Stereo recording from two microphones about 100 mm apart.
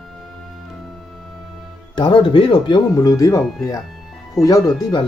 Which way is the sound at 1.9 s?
50° left (ahead or behind).